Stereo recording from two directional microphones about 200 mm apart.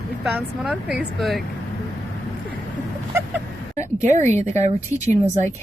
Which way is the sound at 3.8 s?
35° right (ahead or behind).